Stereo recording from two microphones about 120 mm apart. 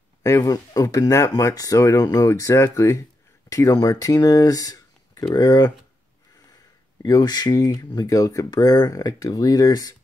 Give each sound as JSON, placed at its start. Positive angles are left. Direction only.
{"t": 0.2, "sound": "speech", "side_deg": 25}
{"t": 7.0, "sound": "speech", "side_deg": 30}